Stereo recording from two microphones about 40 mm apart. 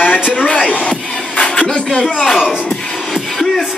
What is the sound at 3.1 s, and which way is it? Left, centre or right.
Music, centre.